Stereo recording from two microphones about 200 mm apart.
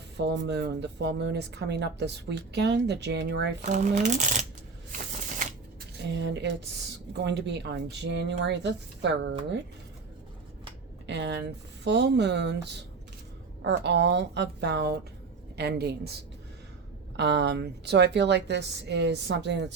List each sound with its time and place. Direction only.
0.2 s speech: 60° right (ahead or behind)
3.7 s speech: 40° right (ahead or behind)
6.0 s speech: 60° right (ahead or behind)
11.0 s speech: 60° right (ahead or behind)
17.2 s speech: 60° right (ahead or behind)